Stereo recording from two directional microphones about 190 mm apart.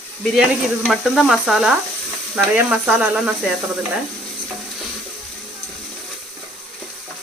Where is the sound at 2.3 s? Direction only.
5° right (ahead or behind).